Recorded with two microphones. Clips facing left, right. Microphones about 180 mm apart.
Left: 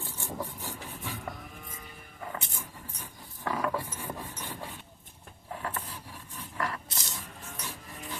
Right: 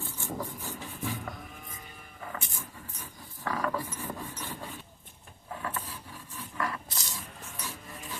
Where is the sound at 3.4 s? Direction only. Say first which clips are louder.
Left 1 dB; 20° left (ahead or behind).